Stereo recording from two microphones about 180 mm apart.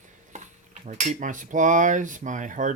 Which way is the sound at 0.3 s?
40° right (ahead or behind).